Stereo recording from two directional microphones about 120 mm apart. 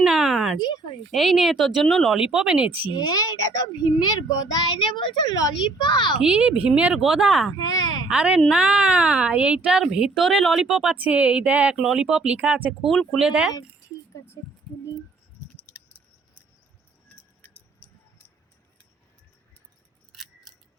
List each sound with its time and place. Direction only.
0.0 s a sound: 5° right (ahead or behind)
0.6 s a child's voice: 35° left (ahead or behind)
1.1 s speech: centre (ahead or behind)
2.9 s a child's voice: 35° left (ahead or behind)
6.1 s speech: 10° right (ahead or behind)
7.6 s speech: 35° left (ahead or behind)
8.1 s speech: 10° right (ahead or behind)
12.8 s speech: centre (ahead or behind)